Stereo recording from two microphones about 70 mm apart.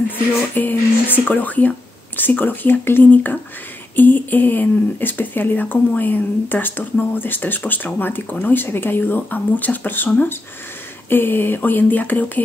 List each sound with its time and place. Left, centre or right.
0.6 s speech: left